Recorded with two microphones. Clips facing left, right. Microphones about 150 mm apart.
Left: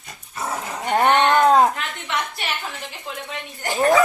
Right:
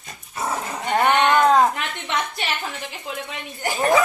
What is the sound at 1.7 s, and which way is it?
Speech, 20° right (ahead or behind).